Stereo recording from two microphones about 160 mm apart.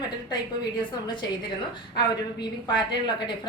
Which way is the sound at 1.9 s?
25° left (ahead or behind).